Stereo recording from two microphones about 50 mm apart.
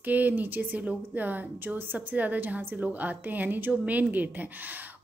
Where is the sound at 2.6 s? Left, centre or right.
Right.